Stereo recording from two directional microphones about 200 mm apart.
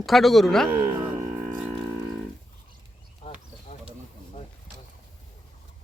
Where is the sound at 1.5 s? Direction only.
5° right (ahead or behind).